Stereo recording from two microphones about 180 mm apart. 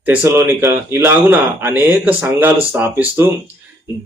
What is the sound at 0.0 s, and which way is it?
A man's voice, 10° right (ahead or behind).